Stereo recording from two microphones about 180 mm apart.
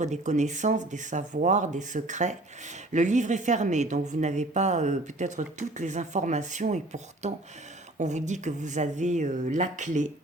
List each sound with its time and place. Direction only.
0.0 s speech: 40° right (ahead or behind)